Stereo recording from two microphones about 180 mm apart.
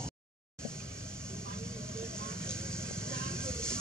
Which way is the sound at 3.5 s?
5° left (ahead or behind).